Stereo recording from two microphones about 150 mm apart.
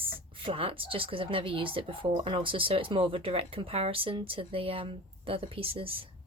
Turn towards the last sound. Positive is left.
turn(degrees=-40)  # may be behind; listen again after turning